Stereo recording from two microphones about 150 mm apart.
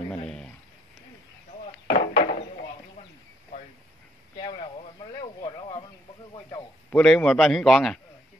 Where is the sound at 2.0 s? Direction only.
70° left (ahead or behind).